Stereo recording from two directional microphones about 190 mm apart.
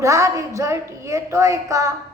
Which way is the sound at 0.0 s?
15° right (ahead or behind).